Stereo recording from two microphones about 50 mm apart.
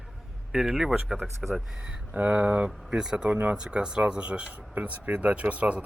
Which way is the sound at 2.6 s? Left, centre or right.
Centre.